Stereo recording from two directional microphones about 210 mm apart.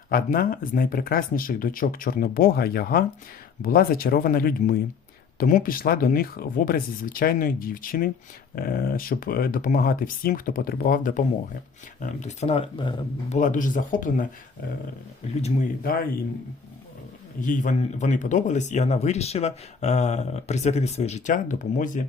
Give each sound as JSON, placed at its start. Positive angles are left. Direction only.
{"t": 0.1, "sound": "speech", "side_deg": 45}
{"t": 13.4, "sound": "speech", "side_deg": 40}
{"t": 15.4, "sound": "speech", "side_deg": 30}
{"t": 17.4, "sound": "speech", "side_deg": 40}